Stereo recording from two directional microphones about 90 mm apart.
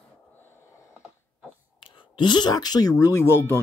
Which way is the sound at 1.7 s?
60° left (ahead or behind).